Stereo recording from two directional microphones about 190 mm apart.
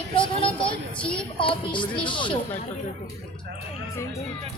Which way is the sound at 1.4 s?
25° left (ahead or behind).